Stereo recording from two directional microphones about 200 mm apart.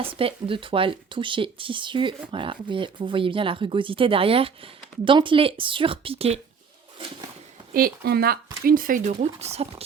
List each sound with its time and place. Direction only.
0.0 s speech: 25° right (ahead or behind)
7.7 s speech: 50° right (ahead or behind); by 9.8 s 30° right (ahead or behind)